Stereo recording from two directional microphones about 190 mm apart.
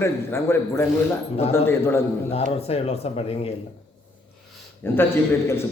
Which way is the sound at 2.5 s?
30° left (ahead or behind).